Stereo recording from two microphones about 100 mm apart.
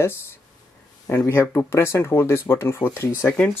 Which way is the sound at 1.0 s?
25° left (ahead or behind).